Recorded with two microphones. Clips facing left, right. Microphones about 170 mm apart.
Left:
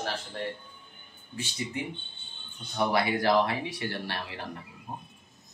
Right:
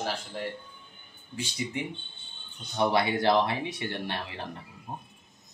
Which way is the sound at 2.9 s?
25° right (ahead or behind).